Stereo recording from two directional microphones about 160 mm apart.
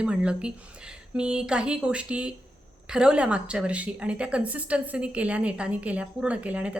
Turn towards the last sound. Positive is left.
turn(degrees=-10)  # may be behind; listen again after turning